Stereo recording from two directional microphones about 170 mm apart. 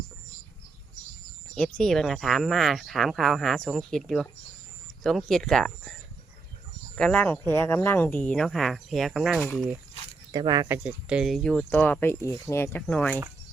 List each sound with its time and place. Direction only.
1.5 s speech: 5° left (ahead or behind)
10.3 s speech: 25° right (ahead or behind)
10.8 s speech: 5° right (ahead or behind)